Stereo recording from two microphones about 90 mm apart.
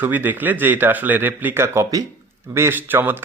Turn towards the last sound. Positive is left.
turn(degrees=-20)  # may be behind; listen again after turning